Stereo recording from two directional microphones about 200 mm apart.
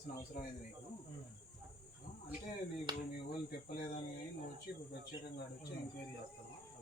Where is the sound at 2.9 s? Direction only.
20° right (ahead or behind).